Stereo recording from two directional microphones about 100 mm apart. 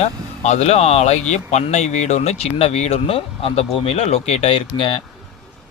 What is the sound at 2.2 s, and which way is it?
A man's voice, 90° left.